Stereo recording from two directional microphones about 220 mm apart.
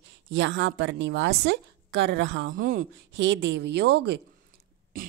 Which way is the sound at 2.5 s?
40° right (ahead or behind).